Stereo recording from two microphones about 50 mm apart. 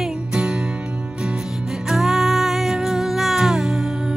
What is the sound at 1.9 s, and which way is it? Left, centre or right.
Music, centre.